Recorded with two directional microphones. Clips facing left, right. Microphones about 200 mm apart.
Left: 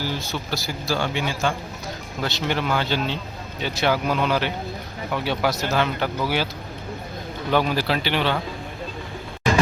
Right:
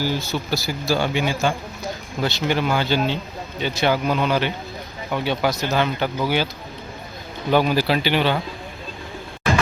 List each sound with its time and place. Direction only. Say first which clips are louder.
0.0 s speech: right 4 dB; 5° right (ahead or behind)
7.5 s speech: right 3 dB; 5° right (ahead or behind)